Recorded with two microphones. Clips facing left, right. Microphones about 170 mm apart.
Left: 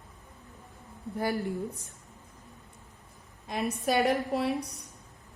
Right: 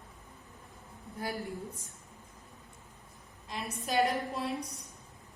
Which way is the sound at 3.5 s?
60° left (ahead or behind).